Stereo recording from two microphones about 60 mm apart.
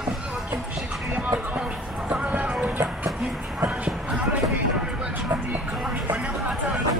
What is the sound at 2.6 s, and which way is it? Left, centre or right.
Music, right.